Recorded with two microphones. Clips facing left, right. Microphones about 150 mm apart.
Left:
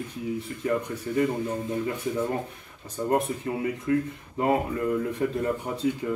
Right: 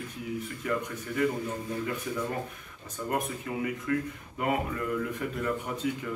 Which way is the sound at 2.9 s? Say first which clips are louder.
Left 6 dB; 30° left (ahead or behind).